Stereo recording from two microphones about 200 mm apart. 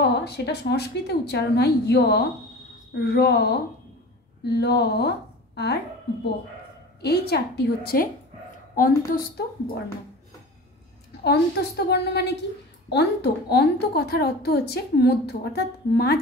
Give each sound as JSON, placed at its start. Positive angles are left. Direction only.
{"t": 0.0, "sound": "a woman's voice", "side_deg": 55}
{"t": 7.0, "sound": "a woman's voice", "side_deg": 55}
{"t": 11.2, "sound": "a woman's voice", "side_deg": 55}